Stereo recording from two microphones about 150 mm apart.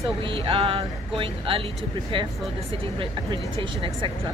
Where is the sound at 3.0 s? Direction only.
35° right (ahead or behind).